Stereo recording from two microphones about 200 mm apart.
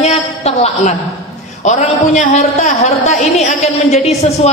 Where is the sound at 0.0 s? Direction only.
35° left (ahead or behind).